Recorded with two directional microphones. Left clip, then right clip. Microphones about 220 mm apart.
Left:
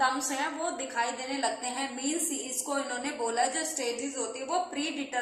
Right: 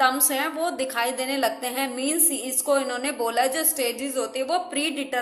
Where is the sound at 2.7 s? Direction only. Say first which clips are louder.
Right 7 dB; 55° right (ahead or behind).